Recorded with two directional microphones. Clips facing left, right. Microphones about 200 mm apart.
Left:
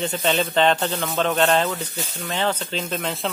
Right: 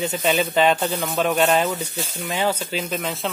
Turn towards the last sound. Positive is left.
turn(degrees=0)  # may be behind; listen again after turning